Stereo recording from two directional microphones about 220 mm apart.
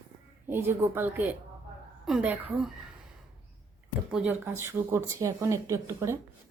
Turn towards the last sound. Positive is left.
turn(degrees=-15)  # may be behind; listen again after turning